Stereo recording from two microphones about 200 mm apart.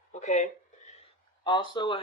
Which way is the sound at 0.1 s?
35° left (ahead or behind).